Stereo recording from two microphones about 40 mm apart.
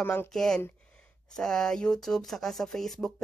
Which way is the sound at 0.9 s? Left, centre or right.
Centre.